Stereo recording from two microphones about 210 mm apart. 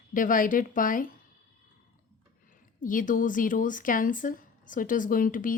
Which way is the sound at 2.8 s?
40° left (ahead or behind).